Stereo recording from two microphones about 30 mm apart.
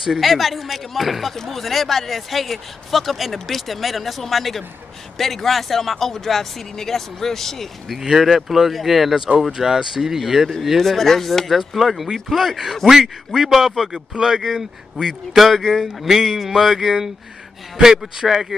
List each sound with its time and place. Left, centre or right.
0.2 s speech: centre
1.3 s speech: centre
8.2 s speech: centre
9.5 s speech: centre
10.8 s speech: centre
14.1 s speech: right
14.4 s speech: centre